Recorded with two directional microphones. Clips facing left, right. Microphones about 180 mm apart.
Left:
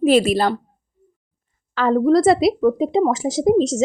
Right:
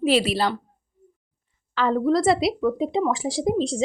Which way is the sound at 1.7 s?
45° left (ahead or behind).